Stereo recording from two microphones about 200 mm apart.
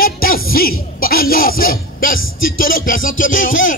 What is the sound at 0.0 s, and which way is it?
Music, 45° left (ahead or behind).